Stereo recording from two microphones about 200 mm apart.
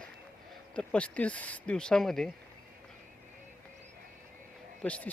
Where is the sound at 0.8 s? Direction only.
5° left (ahead or behind).